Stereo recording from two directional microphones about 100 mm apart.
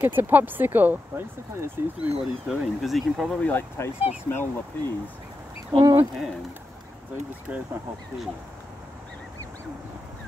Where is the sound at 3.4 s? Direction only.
25° left (ahead or behind).